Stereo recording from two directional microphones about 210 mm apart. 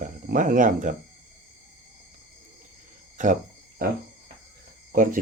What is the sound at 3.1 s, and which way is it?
Cricket, 35° right (ahead or behind).